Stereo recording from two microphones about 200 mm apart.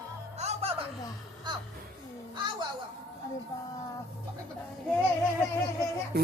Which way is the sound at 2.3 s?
25° right (ahead or behind).